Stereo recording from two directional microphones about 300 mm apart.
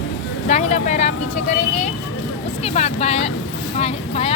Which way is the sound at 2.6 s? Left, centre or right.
Left.